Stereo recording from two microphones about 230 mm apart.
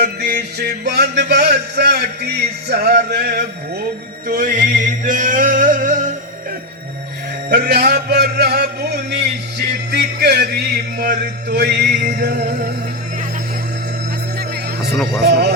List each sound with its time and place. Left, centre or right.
0.0 s music: right
4.3 s male singing: right
7.5 s music: right
14.8 s speech: centre
15.2 s music: right